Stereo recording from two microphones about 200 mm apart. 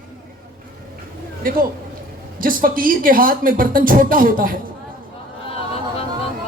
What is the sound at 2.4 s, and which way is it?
Speech, 45° right (ahead or behind).